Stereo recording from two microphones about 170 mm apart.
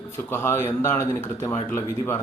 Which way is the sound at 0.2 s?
15° left (ahead or behind).